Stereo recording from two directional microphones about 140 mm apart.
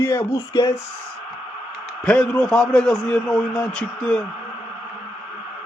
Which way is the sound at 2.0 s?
5° left (ahead or behind).